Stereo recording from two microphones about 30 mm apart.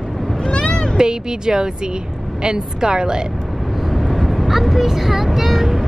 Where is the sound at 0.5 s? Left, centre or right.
Left.